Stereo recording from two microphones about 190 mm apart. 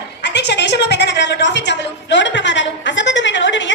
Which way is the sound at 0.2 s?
65° left (ahead or behind).